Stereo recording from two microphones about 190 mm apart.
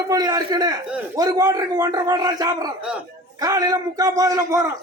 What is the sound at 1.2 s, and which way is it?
A man's voice, 20° right (ahead or behind).